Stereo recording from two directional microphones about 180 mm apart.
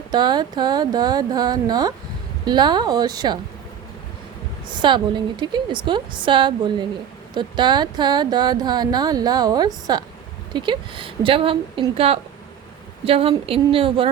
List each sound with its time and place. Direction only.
0.1 s speech: 25° right (ahead or behind)
4.8 s speech: 25° right (ahead or behind)